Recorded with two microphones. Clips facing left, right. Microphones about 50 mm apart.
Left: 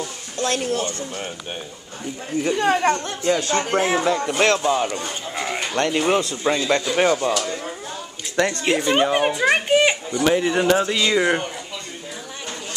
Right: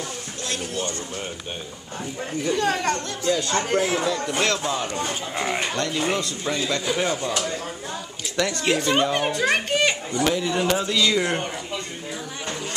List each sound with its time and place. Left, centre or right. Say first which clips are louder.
0.4 s speech: left 8 dB; left
2.4 s speech: left 4 dB; left
4.6 s a child's voice: left 6 dB; centre
5.3 s speech: left 1 dB; centre
5.8 s speech: left 5 dB; left
8.5 s a child's voice: even; centre
10.2 s speech: left 5 dB; left